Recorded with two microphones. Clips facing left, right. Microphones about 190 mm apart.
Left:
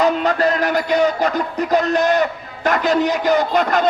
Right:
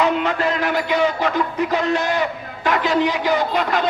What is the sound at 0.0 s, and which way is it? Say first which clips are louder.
A man's voice: left 3 dB; 40° left (ahead or behind).